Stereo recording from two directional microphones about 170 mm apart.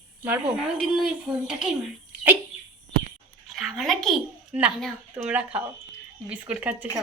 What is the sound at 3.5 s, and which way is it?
A child's voice, centre (ahead or behind).